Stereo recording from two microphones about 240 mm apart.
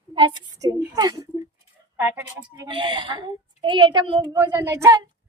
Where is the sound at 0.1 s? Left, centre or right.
Centre.